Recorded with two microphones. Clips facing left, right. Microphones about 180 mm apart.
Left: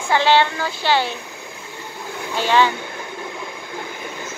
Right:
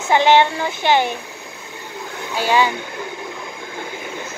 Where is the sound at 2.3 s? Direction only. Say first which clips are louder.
Even; 10° right (ahead or behind).